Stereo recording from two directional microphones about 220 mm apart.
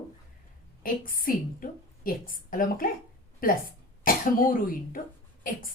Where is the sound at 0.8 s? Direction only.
40° left (ahead or behind).